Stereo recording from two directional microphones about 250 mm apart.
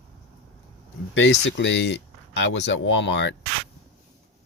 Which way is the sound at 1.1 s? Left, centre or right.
Left.